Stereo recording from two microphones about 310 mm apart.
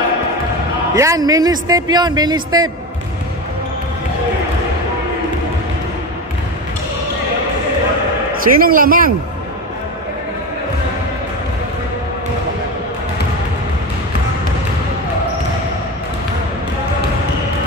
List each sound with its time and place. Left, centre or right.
0.9 s speech: centre
8.5 s a man's voice: right